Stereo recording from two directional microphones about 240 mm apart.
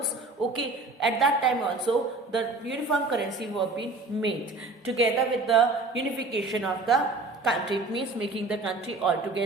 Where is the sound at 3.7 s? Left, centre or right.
Right.